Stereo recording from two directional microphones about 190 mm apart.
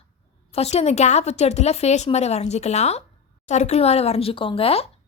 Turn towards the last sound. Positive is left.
turn(degrees=30)  # may be behind; listen again after turning